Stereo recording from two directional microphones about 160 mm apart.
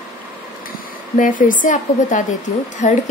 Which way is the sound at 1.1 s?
55° left (ahead or behind).